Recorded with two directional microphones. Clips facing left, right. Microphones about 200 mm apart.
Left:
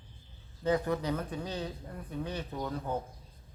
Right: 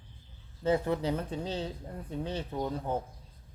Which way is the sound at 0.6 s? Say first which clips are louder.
Right 1 dB; 25° right (ahead or behind).